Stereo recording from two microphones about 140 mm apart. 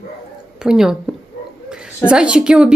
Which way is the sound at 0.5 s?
5° right (ahead or behind).